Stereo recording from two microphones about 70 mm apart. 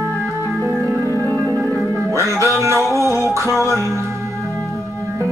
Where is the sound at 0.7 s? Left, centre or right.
Right.